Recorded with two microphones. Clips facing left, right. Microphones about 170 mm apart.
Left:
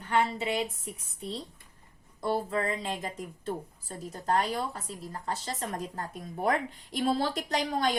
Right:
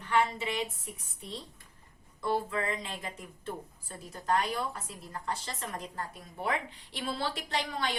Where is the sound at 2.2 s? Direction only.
35° left (ahead or behind).